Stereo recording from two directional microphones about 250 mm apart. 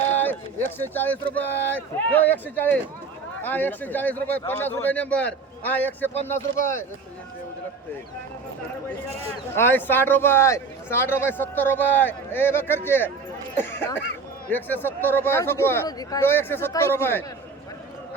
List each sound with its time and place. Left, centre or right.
0.1 s speech: centre
6.3 s speech: left
9.6 s speech: centre